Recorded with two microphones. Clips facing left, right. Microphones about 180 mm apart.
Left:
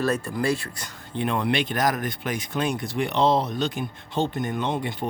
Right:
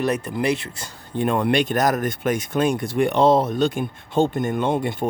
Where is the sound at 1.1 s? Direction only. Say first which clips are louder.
Right 5 dB; 45° right (ahead or behind).